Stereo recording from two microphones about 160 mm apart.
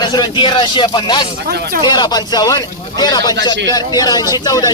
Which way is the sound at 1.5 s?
70° right (ahead or behind).